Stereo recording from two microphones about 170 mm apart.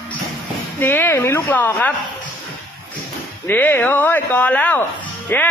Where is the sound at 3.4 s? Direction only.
10° left (ahead or behind).